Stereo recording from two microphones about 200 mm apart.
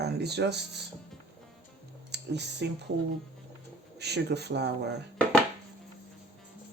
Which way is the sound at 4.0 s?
55° right (ahead or behind).